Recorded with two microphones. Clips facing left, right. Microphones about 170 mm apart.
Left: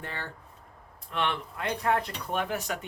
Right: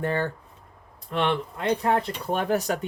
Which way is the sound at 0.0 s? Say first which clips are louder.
Right 13 dB; 45° right (ahead or behind).